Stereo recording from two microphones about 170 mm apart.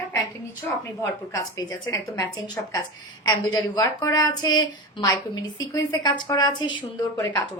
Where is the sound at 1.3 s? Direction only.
20° left (ahead or behind).